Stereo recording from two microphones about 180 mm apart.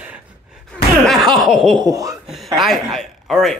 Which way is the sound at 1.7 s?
20° right (ahead or behind).